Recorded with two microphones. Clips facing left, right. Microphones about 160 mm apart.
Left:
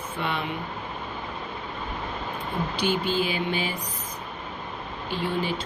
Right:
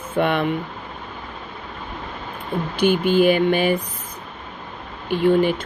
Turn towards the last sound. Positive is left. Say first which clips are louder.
# right 11 dB
turn(degrees=-55)  # may be behind; listen again after turning